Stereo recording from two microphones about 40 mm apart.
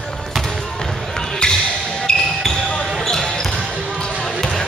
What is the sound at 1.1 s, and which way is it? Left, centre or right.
Basketball bounce, centre.